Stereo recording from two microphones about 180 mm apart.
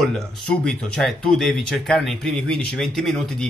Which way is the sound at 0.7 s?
5° left (ahead or behind).